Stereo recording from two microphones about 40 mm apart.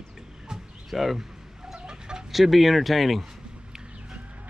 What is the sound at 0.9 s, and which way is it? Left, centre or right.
Speech, centre.